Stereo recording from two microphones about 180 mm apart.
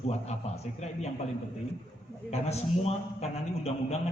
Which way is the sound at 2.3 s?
35° left (ahead or behind).